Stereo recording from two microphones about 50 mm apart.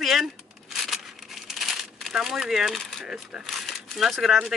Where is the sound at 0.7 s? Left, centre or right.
Centre.